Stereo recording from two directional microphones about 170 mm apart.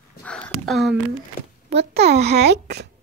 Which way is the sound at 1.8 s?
75° right (ahead or behind).